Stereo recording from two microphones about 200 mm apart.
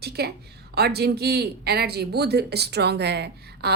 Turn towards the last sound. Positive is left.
turn(degrees=-55)  # may be behind; listen again after turning